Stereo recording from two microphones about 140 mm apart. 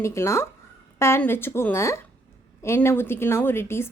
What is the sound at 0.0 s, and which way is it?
A woman's voice, 20° left (ahead or behind).